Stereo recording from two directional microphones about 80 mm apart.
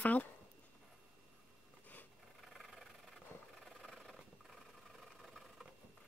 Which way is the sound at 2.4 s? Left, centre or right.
Centre.